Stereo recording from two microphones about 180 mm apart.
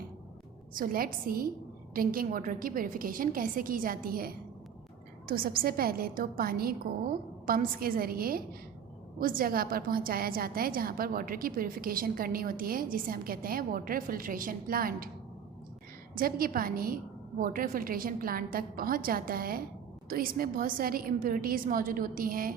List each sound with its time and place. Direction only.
0.7 s a woman's voice: 50° right (ahead or behind)
16.1 s a woman's voice: 55° right (ahead or behind)